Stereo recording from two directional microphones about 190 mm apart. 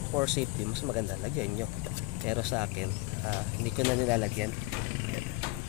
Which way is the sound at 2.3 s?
5° right (ahead or behind).